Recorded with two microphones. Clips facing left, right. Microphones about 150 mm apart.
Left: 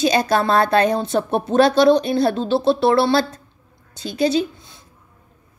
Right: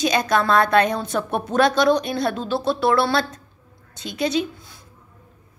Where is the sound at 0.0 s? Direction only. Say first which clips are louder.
Left 2 dB; 30° left (ahead or behind).